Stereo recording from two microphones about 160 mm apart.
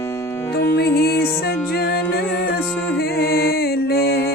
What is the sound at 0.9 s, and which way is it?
Music, 75° left (ahead or behind).